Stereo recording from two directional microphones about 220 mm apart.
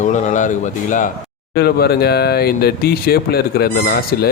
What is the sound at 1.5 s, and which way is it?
Speech, 45° left (ahead or behind).